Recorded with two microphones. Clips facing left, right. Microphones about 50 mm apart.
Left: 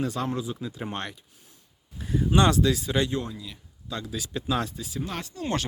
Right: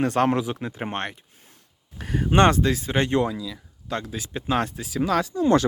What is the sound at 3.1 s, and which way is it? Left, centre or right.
Speech, right.